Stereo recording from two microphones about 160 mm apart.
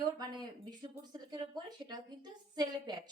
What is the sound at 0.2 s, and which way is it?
Speech, 25° right (ahead or behind).